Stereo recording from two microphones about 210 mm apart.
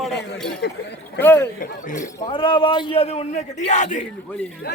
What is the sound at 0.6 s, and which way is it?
Speech, 55° left (ahead or behind).